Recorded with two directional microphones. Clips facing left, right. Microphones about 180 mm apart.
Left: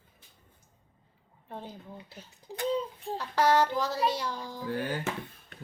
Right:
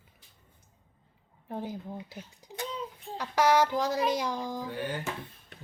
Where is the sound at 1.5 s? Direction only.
10° right (ahead or behind).